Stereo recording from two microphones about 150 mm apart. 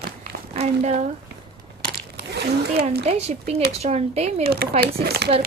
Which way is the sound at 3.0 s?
45° right (ahead or behind).